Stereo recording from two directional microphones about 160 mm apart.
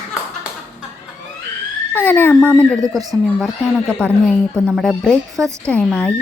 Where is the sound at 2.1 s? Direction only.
10° left (ahead or behind).